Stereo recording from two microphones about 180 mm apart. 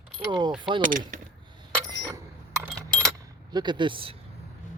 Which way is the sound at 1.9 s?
15° right (ahead or behind).